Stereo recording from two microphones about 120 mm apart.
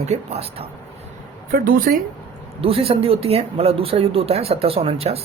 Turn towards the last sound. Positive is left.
turn(degrees=-55)  # may be behind; listen again after turning